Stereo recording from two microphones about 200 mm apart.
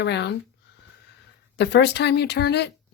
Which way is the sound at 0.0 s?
55° left (ahead or behind).